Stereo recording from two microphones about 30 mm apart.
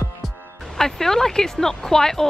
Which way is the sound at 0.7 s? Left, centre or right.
Centre.